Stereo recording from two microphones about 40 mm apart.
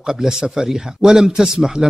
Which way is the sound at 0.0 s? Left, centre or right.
Centre.